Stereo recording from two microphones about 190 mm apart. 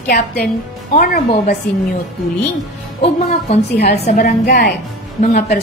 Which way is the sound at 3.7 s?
55° left (ahead or behind).